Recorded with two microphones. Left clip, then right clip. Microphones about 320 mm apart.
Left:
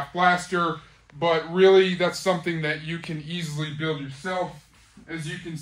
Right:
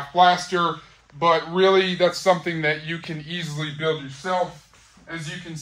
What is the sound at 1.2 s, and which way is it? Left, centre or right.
Speech, right.